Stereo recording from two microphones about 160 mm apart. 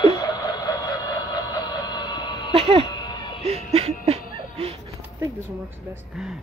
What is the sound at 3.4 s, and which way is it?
Music, 40° right (ahead or behind).